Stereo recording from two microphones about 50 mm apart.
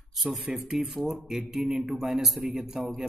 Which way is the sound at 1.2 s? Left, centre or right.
Centre.